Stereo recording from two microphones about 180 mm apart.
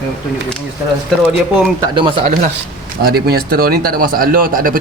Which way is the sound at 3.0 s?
60° right (ahead or behind).